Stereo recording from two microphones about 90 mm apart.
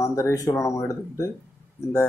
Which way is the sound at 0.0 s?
35° left (ahead or behind).